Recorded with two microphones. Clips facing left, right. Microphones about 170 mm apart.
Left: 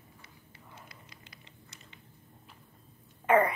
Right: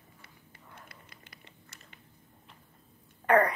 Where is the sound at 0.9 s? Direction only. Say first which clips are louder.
Even; 55° right (ahead or behind).